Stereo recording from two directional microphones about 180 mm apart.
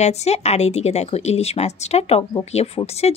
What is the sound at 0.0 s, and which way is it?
Speech, 40° left (ahead or behind).